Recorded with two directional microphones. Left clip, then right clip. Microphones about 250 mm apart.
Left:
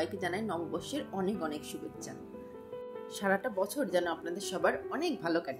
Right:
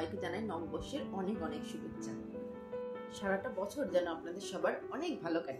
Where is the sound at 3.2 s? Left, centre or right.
Left.